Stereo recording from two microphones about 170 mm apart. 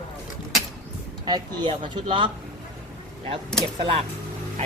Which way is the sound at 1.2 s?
25° right (ahead or behind).